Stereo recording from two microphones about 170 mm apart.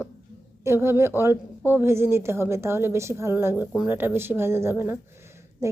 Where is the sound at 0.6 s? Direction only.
15° right (ahead or behind).